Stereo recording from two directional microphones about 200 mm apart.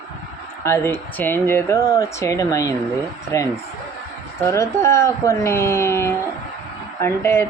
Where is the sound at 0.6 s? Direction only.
15° left (ahead or behind).